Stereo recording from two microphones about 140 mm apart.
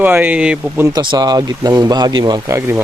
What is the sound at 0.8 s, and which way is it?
Speech, 30° right (ahead or behind).